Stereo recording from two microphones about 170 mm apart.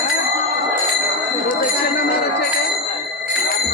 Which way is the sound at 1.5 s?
60° left (ahead or behind).